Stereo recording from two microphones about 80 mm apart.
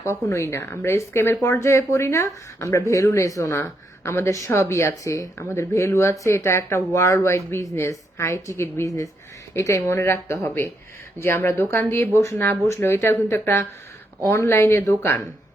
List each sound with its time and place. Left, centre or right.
0.0 s speech: left